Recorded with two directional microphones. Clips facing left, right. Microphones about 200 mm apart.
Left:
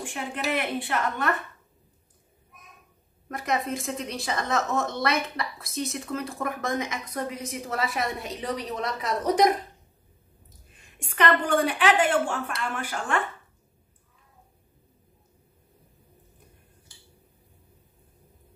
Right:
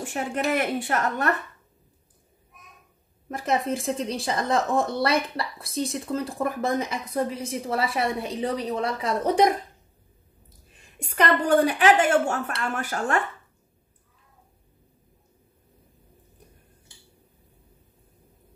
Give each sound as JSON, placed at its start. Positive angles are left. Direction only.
{"t": 0.0, "sound": "a woman's voice", "side_deg": -40}
{"t": 3.3, "sound": "a woman's voice", "side_deg": -30}
{"t": 11.0, "sound": "a woman's voice", "side_deg": -35}